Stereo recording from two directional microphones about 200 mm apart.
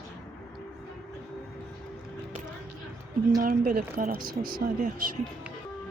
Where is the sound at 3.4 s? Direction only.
45° right (ahead or behind).